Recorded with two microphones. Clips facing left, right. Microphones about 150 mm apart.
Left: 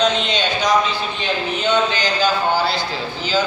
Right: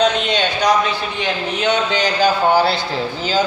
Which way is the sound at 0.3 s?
60° right (ahead or behind).